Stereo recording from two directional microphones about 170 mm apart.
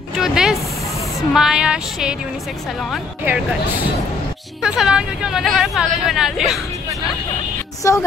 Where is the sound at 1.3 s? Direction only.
5° right (ahead or behind).